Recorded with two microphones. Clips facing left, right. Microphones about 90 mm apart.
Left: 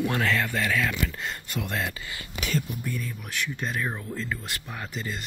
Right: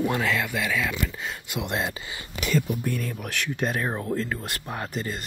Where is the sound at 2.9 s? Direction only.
70° right (ahead or behind).